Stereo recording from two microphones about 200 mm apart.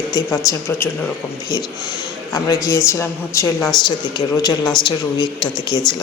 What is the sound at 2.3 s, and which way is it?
Speech, 15° left (ahead or behind).